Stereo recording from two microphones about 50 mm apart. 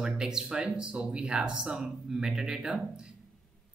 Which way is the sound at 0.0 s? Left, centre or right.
Centre.